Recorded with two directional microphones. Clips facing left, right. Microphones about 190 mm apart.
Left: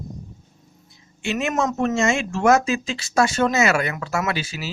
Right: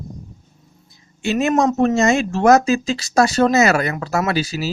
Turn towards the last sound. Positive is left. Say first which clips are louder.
# right 5 dB
turn(degrees=-40)  # may be behind; listen again after turning